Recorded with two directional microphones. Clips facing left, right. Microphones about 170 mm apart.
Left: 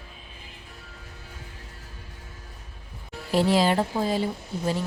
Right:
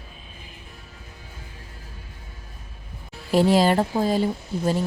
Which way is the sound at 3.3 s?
45° right (ahead or behind).